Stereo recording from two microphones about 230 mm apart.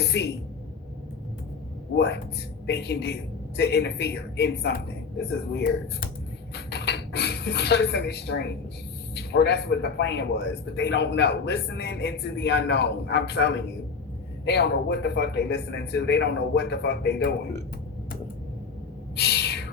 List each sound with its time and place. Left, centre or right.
0.0 s a man's voice: left
2.0 s a man's voice: left
19.1 s owl: left